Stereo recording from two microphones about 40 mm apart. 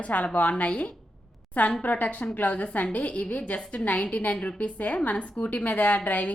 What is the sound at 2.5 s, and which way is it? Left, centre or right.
A woman's voice, left.